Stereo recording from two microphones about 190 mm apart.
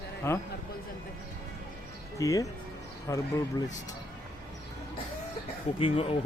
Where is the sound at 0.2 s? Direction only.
15° left (ahead or behind).